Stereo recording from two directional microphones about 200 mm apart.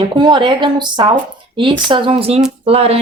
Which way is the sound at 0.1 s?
20° right (ahead or behind).